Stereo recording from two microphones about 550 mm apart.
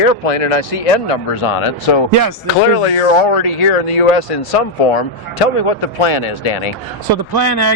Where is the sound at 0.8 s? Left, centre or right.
Left.